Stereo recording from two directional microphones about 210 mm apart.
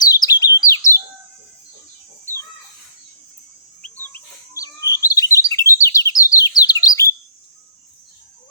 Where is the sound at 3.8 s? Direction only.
10° left (ahead or behind).